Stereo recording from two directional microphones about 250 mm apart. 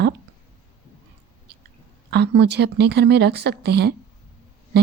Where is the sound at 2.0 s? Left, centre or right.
Right.